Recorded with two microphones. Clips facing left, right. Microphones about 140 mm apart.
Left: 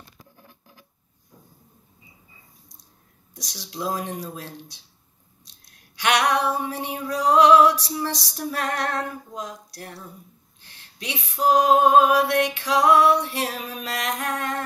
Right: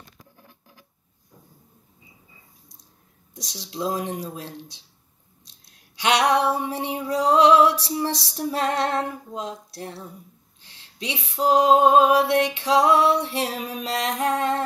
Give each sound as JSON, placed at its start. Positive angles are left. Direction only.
{"t": 3.3, "sound": "music", "side_deg": -25}
{"t": 5.9, "sound": "music", "side_deg": -25}
{"t": 10.6, "sound": "a sound", "side_deg": 55}
{"t": 11.0, "sound": "music", "side_deg": -25}